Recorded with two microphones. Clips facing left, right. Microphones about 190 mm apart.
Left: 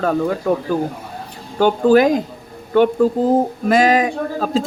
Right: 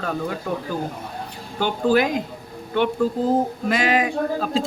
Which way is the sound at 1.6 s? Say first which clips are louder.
Left 7 dB; 45° left (ahead or behind).